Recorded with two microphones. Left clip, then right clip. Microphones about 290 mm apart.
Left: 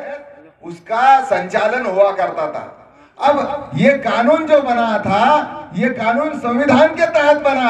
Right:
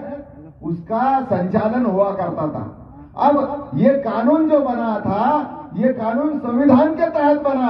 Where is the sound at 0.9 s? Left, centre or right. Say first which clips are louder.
Left 6 dB; left.